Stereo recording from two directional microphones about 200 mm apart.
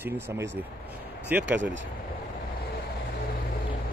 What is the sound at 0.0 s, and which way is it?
Speech, 10° right (ahead or behind).